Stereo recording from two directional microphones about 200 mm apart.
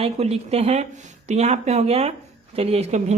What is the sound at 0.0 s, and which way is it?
Speech, 30° right (ahead or behind).